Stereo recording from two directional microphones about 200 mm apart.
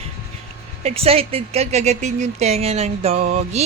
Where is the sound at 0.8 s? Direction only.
30° right (ahead or behind).